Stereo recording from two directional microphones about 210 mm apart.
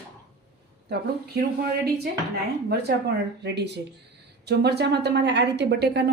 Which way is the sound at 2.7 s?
50° right (ahead or behind).